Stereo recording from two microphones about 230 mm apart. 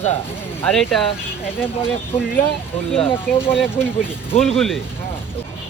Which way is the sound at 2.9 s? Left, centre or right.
Left.